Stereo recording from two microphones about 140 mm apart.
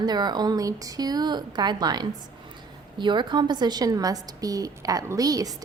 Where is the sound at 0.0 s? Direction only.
30° right (ahead or behind).